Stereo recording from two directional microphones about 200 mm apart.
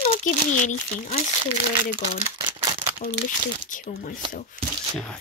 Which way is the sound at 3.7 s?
40° left (ahead or behind).